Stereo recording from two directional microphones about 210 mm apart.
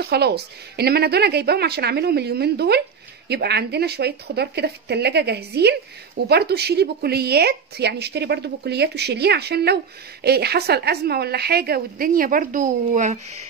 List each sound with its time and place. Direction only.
0.0 s speech: 50° right (ahead or behind)